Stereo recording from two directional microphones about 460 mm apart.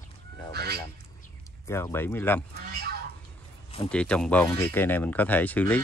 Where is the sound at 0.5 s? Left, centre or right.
Right.